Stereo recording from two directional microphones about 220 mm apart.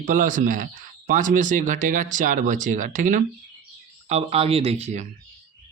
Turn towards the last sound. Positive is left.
turn(degrees=-30)  # may be behind; listen again after turning